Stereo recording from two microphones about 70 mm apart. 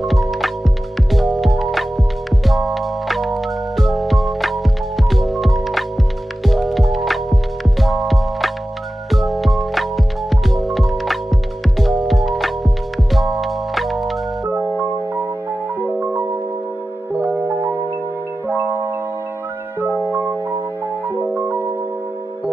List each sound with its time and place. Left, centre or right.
0.0 s music: centre
18.5 s marimba: right
19.9 s music: right
21.3 s music: right